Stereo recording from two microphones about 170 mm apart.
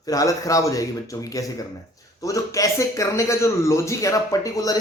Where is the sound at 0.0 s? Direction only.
20° left (ahead or behind).